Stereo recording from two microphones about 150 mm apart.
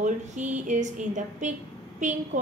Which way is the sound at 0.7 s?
55° right (ahead or behind).